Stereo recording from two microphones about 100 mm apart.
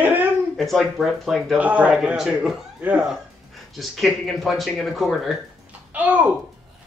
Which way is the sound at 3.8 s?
Centre (ahead or behind).